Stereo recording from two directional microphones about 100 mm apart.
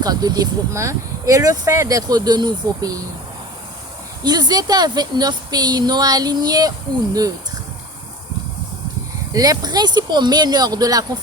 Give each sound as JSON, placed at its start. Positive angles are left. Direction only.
{"t": 0.0, "sound": "a woman's voice", "side_deg": -40}
{"t": 4.2, "sound": "a woman's voice", "side_deg": -45}
{"t": 9.3, "sound": "a woman's voice", "side_deg": -40}